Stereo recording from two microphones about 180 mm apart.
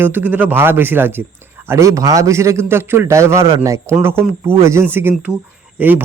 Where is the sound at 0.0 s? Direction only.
10° right (ahead or behind).